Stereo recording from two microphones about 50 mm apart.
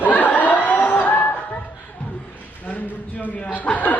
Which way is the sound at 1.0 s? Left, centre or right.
Left.